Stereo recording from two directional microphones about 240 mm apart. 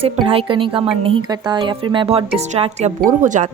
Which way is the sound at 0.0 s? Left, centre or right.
Right.